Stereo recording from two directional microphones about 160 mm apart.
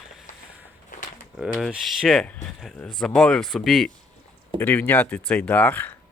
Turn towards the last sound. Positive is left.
turn(degrees=10)  # may be behind; listen again after turning